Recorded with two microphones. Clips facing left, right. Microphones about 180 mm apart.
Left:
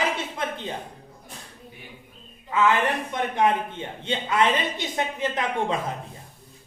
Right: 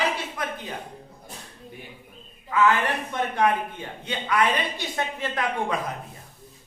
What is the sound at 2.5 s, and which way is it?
A man's voice, 25° left (ahead or behind).